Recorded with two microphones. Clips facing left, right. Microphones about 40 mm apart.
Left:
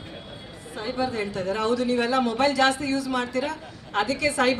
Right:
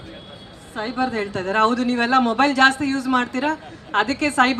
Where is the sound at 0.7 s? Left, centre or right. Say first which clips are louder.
Right 4 dB; right.